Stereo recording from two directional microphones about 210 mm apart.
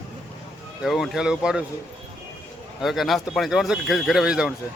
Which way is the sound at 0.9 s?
Centre (ahead or behind).